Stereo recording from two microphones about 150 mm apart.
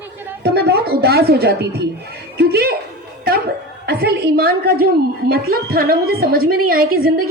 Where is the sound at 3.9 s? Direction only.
90° right.